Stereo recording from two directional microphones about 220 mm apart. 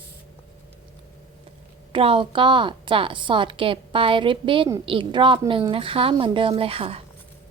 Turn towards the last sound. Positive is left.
turn(degrees=-25)  # may be behind; listen again after turning